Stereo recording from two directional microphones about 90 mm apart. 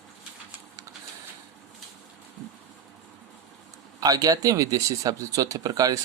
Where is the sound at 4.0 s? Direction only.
45° right (ahead or behind).